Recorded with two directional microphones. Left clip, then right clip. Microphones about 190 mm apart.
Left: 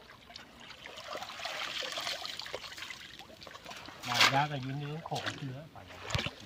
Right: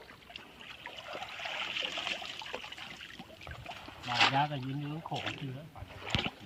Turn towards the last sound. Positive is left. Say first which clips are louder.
# right 2 dB
turn(degrees=15)  # may be behind; listen again after turning